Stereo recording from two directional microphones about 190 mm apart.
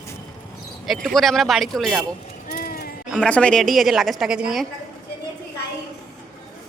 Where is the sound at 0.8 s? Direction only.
Centre (ahead or behind).